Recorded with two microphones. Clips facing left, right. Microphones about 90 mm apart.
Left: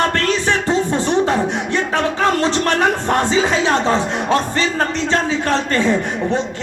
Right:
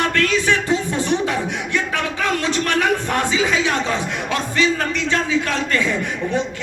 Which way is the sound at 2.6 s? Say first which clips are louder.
Left 3 dB; 40° left (ahead or behind).